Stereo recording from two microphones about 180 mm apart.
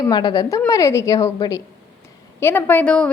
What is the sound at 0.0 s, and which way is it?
A woman's voice, 25° left (ahead or behind).